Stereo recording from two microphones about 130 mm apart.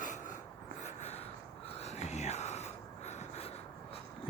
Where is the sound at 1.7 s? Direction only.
55° left (ahead or behind).